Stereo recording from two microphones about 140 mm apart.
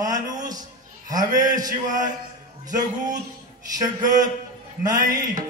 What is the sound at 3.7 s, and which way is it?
A man's voice, 25° right (ahead or behind).